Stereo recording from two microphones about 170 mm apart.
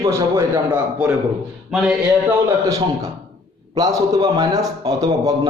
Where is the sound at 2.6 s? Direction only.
20° right (ahead or behind).